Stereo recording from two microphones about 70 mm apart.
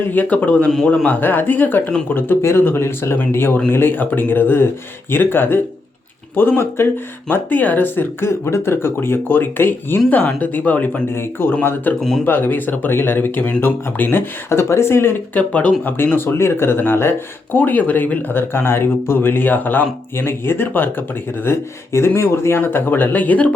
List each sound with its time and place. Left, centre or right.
0.1 s speech: left
11.1 s speech: left
11.9 s speech: centre
12.2 s speech: left
15.4 s speech: left